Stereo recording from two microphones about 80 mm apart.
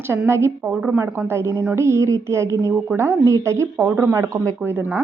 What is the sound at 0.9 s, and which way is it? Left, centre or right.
A woman's voice, right.